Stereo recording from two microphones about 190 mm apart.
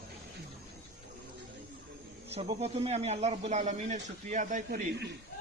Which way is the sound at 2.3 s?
35° right (ahead or behind).